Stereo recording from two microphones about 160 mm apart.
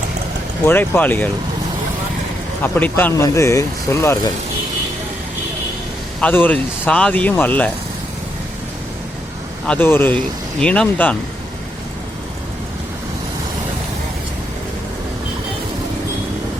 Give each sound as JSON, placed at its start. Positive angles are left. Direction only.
{"t": 0.6, "sound": "speech", "side_deg": 10}
{"t": 2.7, "sound": "speech", "side_deg": 10}
{"t": 6.1, "sound": "speech", "side_deg": 10}
{"t": 9.6, "sound": "speech", "side_deg": 10}